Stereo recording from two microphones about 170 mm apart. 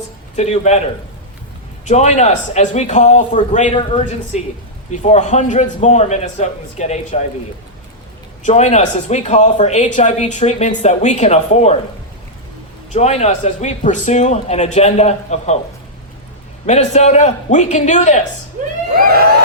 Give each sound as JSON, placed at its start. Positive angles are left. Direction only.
{"t": 0.3, "sound": "a man's voice", "side_deg": 40}
{"t": 1.8, "sound": "a man's voice", "side_deg": 45}
{"t": 8.4, "sound": "speech", "side_deg": 40}
{"t": 12.9, "sound": "a man's voice", "side_deg": 40}
{"t": 16.6, "sound": "speech", "side_deg": 45}
{"t": 18.9, "sound": "vehicle", "side_deg": -60}